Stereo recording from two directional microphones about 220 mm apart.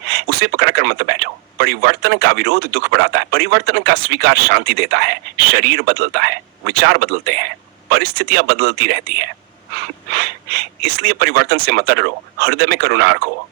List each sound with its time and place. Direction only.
0.1 s speech: 45° right (ahead or behind)